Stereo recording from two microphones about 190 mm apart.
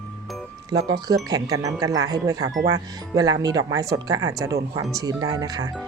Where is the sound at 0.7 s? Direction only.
20° right (ahead or behind).